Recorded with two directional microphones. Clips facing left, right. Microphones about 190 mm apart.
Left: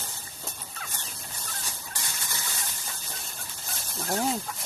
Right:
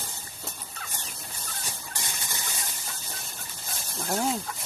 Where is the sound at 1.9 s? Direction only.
20° right (ahead or behind).